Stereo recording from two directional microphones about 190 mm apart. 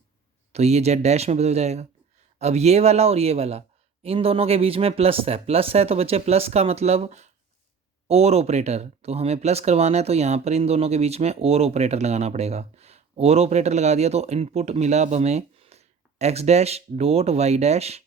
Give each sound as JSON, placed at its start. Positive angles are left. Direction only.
{"t": 0.5, "sound": "speech", "side_deg": -35}